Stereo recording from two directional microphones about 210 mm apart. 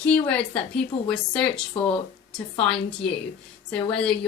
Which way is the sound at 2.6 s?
5° left (ahead or behind).